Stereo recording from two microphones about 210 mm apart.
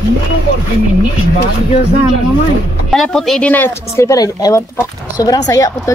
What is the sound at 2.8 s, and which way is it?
Speech, centre (ahead or behind).